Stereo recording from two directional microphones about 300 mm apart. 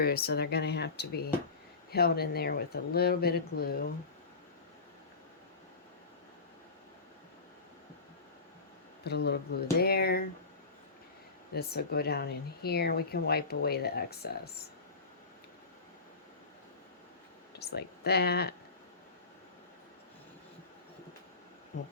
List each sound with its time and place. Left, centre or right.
0.0 s speech: left
9.0 s speech: left
11.5 s speech: left
17.6 s speech: left